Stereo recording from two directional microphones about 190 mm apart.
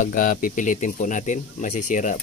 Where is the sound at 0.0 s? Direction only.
45° left (ahead or behind).